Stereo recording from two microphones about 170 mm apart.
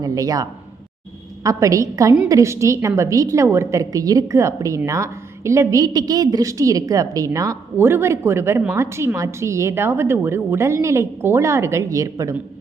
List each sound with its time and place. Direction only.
0.0 s a woman's voice: 20° right (ahead or behind)
1.5 s a woman's voice: 20° right (ahead or behind)